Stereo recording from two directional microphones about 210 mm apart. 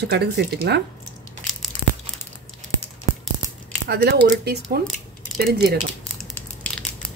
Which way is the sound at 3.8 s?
50° right (ahead or behind).